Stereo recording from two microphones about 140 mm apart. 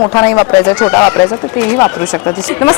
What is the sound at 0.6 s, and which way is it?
Speech, 5° left (ahead or behind).